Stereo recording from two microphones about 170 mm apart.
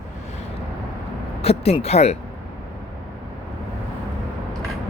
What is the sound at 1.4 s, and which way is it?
Speech, 35° left (ahead or behind).